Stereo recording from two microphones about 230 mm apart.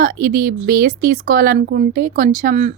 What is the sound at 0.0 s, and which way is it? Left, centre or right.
Speech, right.